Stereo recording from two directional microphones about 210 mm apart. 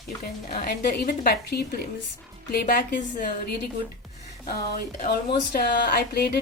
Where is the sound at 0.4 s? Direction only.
45° left (ahead or behind).